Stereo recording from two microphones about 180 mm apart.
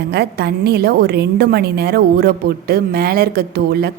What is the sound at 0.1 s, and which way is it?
A woman's voice, 65° right (ahead or behind).